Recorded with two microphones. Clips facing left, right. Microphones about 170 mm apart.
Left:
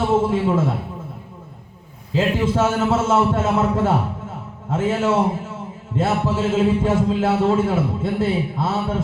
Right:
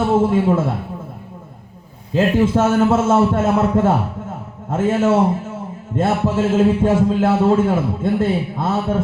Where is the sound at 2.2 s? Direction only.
50° right (ahead or behind).